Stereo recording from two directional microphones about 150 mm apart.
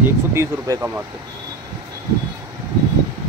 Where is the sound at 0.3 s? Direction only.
20° right (ahead or behind).